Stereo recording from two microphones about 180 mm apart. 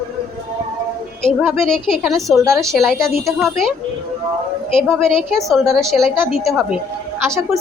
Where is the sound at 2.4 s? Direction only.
15° right (ahead or behind).